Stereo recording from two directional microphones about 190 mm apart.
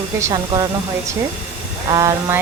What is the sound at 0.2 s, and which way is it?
Speech, 20° right (ahead or behind).